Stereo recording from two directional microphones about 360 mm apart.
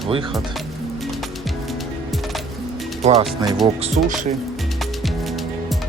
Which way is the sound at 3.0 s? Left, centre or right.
Centre.